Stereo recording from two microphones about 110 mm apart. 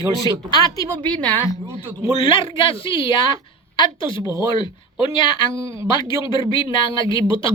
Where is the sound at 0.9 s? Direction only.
10° left (ahead or behind).